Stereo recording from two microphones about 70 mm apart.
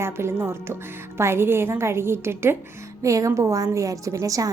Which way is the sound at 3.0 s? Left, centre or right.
Right.